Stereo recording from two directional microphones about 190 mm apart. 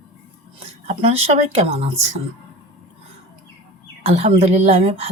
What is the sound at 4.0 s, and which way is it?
A woman's voice, 35° right (ahead or behind).